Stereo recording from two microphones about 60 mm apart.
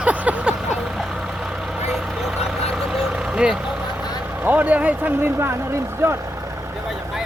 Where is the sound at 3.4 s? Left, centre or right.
Centre.